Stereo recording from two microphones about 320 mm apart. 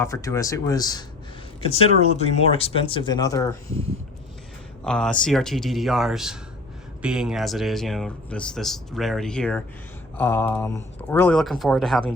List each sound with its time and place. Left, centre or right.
0.0 s speech: centre
4.8 s speech: centre